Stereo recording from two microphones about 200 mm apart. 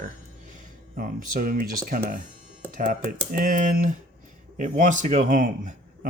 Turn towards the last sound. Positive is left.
turn(degrees=-40)  # may be behind; listen again after turning